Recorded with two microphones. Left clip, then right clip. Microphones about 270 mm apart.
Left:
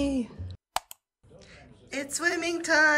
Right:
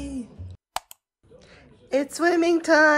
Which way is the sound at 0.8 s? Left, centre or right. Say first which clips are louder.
Even; centre.